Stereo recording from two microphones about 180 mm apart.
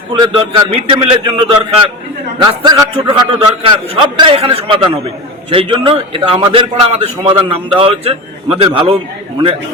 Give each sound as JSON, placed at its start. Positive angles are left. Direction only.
{"t": 0.1, "sound": "a man's voice", "side_deg": -25}